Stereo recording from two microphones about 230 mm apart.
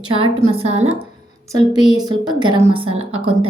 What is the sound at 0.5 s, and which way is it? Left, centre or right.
Speech, right.